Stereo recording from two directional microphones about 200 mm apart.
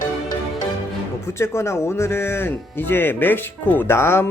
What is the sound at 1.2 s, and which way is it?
Speech, 15° left (ahead or behind).